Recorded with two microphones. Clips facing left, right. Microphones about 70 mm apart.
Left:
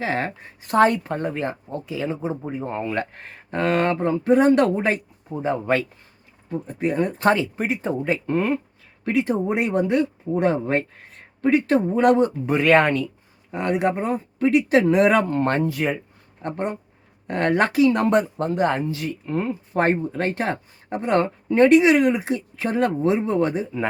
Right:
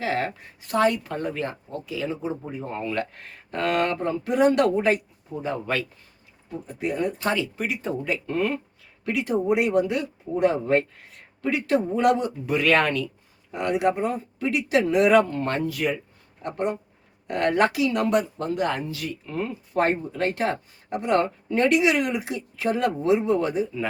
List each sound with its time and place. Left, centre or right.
0.0 s speech: left